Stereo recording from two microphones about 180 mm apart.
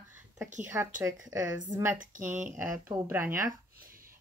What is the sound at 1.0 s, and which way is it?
Speech, 15° right (ahead or behind).